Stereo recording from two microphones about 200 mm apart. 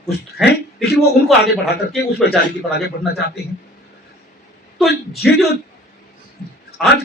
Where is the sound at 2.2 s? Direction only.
55° left (ahead or behind).